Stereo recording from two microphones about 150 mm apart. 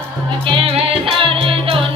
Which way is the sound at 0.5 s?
35° right (ahead or behind).